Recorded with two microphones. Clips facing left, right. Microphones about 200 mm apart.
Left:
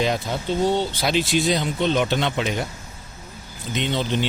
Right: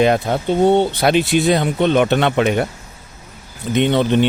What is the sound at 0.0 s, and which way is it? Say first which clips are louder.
Speech: right 8 dB; 60° right (ahead or behind).